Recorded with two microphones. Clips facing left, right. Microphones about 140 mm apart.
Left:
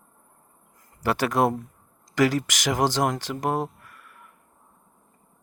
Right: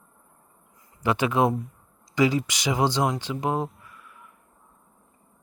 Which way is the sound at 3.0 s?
50° left (ahead or behind).